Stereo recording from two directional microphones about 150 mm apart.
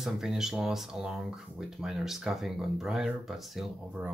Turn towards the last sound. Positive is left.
turn(degrees=-5)  # may be behind; listen again after turning